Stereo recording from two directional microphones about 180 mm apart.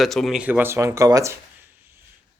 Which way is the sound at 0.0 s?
Centre (ahead or behind).